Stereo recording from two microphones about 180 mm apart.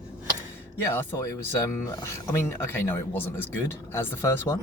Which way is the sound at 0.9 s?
15° left (ahead or behind).